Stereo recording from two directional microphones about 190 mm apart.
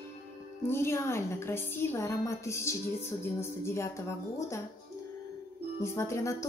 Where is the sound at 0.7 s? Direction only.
15° left (ahead or behind).